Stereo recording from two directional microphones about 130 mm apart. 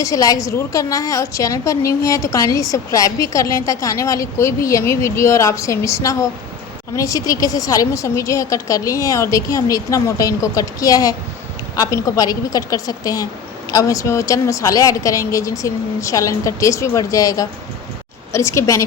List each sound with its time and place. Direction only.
0.0 s a woman's voice: 25° left (ahead or behind)